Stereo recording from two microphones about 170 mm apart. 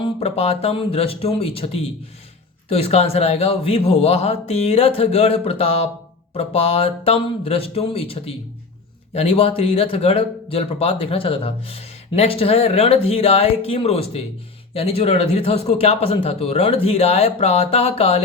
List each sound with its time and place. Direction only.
0.0 s speech: 35° left (ahead or behind)